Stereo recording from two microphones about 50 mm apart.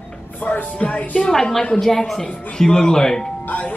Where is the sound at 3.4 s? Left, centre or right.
Left.